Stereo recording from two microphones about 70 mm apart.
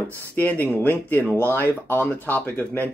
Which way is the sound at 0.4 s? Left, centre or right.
Left.